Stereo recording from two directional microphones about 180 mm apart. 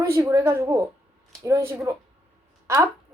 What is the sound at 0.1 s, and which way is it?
A woman's voice, 15° right (ahead or behind).